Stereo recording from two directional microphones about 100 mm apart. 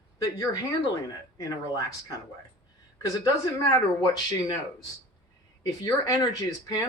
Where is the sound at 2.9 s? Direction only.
35° left (ahead or behind).